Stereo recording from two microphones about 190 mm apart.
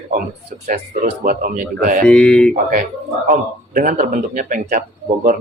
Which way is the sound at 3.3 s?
45° right (ahead or behind).